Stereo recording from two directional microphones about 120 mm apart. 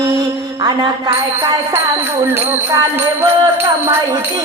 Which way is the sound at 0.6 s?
35° right (ahead or behind).